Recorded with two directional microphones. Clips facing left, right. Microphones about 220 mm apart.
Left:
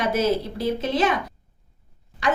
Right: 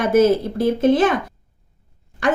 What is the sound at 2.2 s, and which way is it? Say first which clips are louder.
Speech: right 4 dB; 50° right (ahead or behind).